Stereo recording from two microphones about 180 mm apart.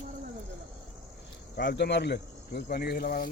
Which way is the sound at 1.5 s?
70° left (ahead or behind).